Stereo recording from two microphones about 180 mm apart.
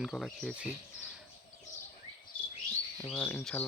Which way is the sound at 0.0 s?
Centre (ahead or behind).